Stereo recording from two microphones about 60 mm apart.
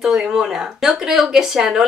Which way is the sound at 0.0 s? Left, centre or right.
Centre.